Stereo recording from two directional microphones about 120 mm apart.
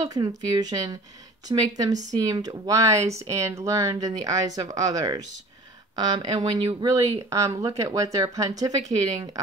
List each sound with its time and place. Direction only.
0.0 s a woman's voice: 30° right (ahead or behind)